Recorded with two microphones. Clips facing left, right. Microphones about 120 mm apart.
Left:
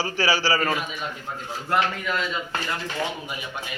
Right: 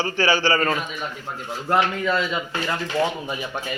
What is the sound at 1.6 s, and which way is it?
Speech, 25° right (ahead or behind).